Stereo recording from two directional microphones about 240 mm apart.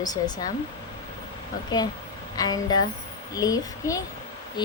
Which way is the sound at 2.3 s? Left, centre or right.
Centre.